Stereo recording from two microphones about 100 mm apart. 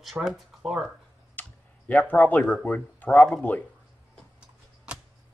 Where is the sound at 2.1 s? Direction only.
15° left (ahead or behind).